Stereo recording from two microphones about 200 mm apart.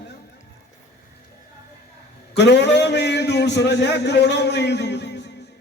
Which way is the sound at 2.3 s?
60° left (ahead or behind).